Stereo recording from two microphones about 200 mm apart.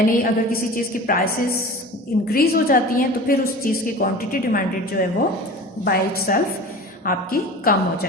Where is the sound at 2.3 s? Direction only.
45° left (ahead or behind).